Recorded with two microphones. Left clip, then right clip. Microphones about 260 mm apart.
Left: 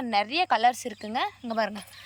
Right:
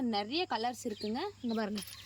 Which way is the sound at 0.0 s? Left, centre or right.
Left.